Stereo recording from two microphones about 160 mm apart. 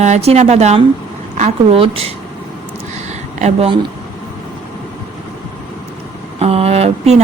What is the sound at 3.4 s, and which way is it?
Speech, 40° right (ahead or behind).